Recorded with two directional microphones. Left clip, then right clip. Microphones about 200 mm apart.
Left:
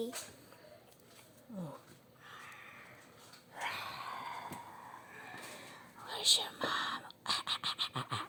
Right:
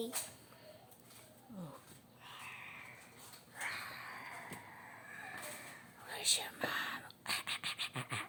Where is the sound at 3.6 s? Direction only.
25° left (ahead or behind).